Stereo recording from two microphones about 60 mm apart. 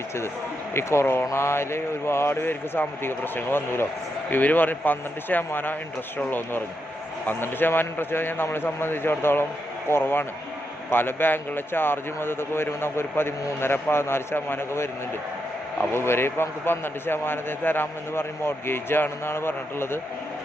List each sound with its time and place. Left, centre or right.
0.7 s speech: left
15.9 s speech: left